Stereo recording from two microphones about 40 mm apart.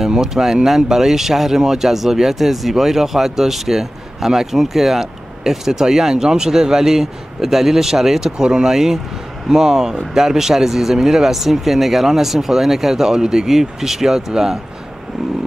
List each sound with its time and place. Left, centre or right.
0.0 s speech: centre